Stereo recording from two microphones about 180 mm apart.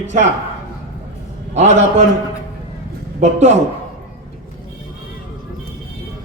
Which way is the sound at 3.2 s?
40° right (ahead or behind).